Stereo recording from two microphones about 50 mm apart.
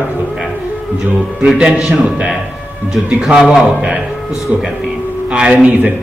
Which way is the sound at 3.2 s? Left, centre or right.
Centre.